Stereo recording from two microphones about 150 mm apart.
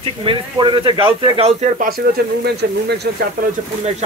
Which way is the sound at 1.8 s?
85° right.